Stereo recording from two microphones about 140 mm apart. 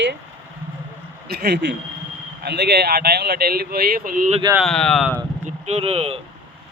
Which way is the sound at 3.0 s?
90° right.